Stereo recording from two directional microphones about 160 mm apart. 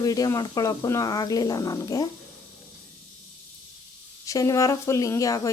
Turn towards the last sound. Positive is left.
turn(degrees=20)  # may be behind; listen again after turning